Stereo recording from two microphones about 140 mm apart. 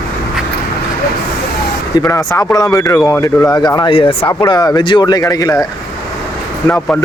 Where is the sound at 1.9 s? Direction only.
25° left (ahead or behind); by 4.2 s 40° left (ahead or behind).